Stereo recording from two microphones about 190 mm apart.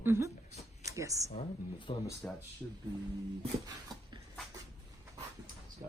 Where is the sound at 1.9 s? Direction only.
30° left (ahead or behind).